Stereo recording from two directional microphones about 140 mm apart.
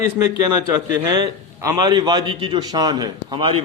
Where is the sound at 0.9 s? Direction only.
25° right (ahead or behind).